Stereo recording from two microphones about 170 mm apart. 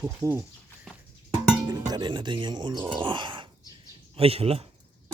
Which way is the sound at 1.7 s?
25° right (ahead or behind).